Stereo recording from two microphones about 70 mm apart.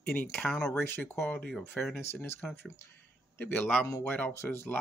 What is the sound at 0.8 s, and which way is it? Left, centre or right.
Speech, left.